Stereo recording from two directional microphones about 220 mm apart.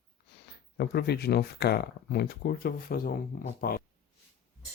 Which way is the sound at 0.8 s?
45° left (ahead or behind).